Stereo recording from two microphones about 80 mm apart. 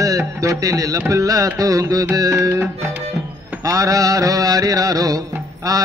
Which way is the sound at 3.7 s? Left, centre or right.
Right.